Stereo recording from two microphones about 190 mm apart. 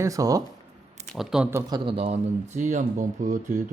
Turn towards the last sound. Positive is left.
turn(degrees=-40)  # may be behind; listen again after turning